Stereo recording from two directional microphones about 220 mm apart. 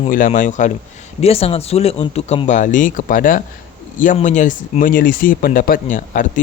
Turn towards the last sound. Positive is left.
turn(degrees=35)  # may be behind; listen again after turning